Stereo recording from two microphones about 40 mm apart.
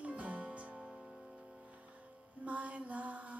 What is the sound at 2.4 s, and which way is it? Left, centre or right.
Mantra, right.